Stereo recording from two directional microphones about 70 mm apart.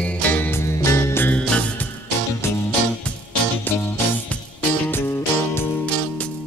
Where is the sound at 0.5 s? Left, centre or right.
Left.